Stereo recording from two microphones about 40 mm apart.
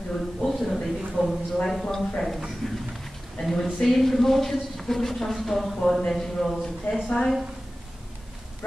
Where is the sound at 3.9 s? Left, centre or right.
Centre.